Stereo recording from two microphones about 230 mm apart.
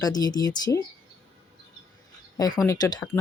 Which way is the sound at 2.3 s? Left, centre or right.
Centre.